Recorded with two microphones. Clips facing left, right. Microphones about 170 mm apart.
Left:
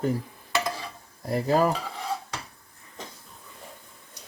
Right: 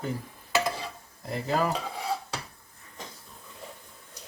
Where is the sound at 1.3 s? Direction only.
45° left (ahead or behind).